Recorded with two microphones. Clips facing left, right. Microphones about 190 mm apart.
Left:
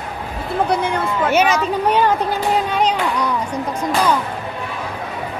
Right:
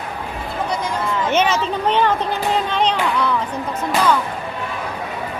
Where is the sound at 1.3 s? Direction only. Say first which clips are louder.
Left 2 dB; 10° left (ahead or behind).